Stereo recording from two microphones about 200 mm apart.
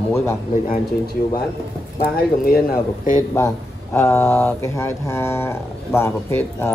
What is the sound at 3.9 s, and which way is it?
Speech, 15° left (ahead or behind).